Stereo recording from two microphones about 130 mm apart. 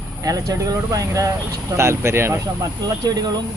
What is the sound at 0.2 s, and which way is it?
Speech, 25° right (ahead or behind).